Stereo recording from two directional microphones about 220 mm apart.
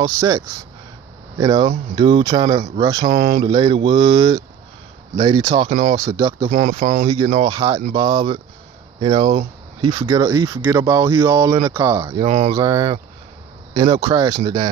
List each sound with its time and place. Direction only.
0.0 s speech: 15° right (ahead or behind)
2.0 s mantra: 20° right (ahead or behind)
3.0 s speech: 40° right (ahead or behind)
3.4 s mantra: 20° right (ahead or behind)
5.7 s speech: 35° right (ahead or behind)
5.9 s speech: 15° right (ahead or behind)
6.5 s speech: 35° right (ahead or behind)
7.1 s mantra: 20° right (ahead or behind)
9.8 s speech: 20° right (ahead or behind)
12.3 s speech: 30° right (ahead or behind)
12.5 s speech: 15° right (ahead or behind)